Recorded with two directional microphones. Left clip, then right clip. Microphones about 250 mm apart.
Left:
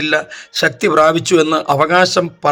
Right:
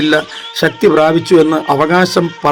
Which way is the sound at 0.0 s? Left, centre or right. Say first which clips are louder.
Right 4 dB; centre.